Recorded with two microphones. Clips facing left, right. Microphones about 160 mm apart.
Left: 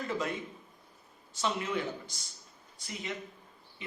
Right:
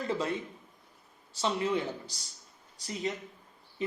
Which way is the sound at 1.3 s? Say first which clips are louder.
Right 3 dB; 30° right (ahead or behind).